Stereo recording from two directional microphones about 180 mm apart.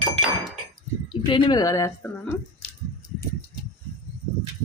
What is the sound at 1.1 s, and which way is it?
A woman's voice, 25° left (ahead or behind).